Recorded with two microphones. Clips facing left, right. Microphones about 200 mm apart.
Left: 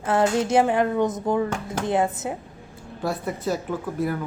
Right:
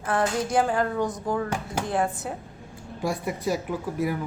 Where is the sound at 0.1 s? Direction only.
25° left (ahead or behind).